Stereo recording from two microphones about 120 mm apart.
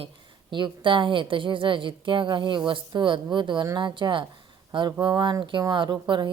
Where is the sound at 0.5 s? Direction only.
40° right (ahead or behind).